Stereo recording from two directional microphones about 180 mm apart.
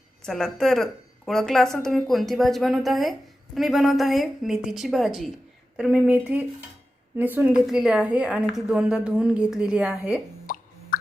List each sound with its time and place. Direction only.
0.2 s a woman's voice: centre (ahead or behind)
10.4 s plop: 50° left (ahead or behind)